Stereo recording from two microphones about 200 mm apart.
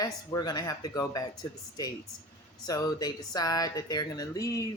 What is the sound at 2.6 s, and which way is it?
Speech, 20° left (ahead or behind).